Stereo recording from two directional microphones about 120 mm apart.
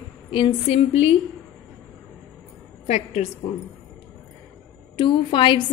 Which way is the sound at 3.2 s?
70° left (ahead or behind).